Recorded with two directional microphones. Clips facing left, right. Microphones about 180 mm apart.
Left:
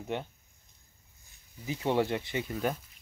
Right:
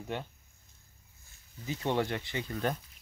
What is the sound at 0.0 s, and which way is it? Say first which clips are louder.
Speech: left 2 dB; 15° left (ahead or behind).